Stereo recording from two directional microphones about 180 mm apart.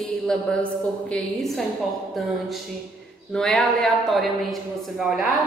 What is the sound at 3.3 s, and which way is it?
A woman's voice, 5° left (ahead or behind).